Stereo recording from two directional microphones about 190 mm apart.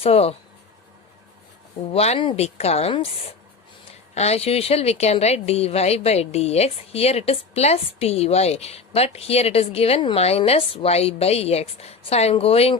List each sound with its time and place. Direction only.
0.0 s a woman's voice: 30° left (ahead or behind)
1.9 s a woman's voice: 30° left (ahead or behind)
4.1 s a woman's voice: 35° left (ahead or behind)